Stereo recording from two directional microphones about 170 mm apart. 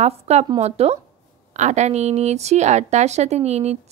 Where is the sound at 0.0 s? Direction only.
40° right (ahead or behind).